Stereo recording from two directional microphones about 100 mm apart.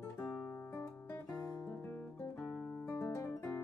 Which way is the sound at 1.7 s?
15° left (ahead or behind).